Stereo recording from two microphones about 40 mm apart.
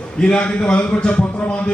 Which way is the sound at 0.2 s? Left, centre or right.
Left.